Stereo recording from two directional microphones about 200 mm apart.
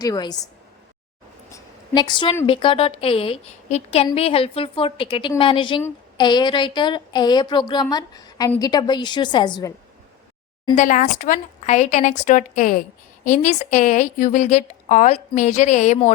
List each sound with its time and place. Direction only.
0.0 s a woman's voice: 20° left (ahead or behind)
1.5 s a sound: 15° left (ahead or behind)
2.5 s a woman's voice: 25° left (ahead or behind)
10.8 s a woman's voice: 40° left (ahead or behind)